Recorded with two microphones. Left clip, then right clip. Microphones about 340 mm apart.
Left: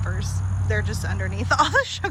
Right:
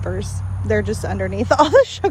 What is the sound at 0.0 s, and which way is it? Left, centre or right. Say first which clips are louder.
Speech: right 6 dB; centre.